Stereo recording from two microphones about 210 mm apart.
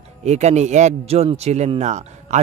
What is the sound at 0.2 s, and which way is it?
A man's voice, 30° right (ahead or behind).